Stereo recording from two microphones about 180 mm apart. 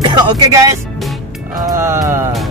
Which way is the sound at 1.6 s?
15° right (ahead or behind).